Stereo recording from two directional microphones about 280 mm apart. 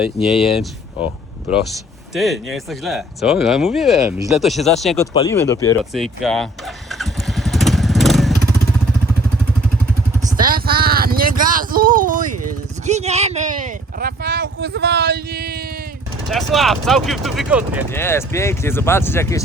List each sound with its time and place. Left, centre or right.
0.0 s speech: centre
5.1 s speech: centre
5.9 s speech: centre
7.0 s motorcycle: centre
10.3 s a sound: right
12.8 s speech: right
14.0 s speech: right
16.3 s speech: centre
17.9 s speech: centre